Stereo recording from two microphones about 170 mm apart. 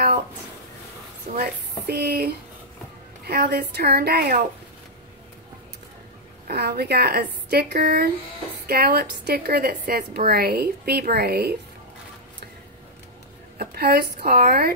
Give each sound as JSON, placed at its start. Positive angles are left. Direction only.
{"t": 1.2, "sound": "a woman's voice", "side_deg": -60}
{"t": 6.4, "sound": "a woman's voice", "side_deg": -65}
{"t": 13.6, "sound": "a woman's voice", "side_deg": -65}